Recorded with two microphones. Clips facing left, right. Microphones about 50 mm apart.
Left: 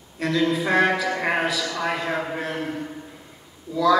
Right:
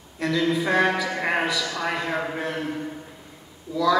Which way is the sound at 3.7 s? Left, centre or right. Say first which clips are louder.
Left 2 dB; centre.